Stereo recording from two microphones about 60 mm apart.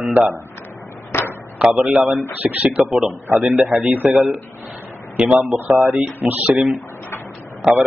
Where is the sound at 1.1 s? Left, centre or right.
Left.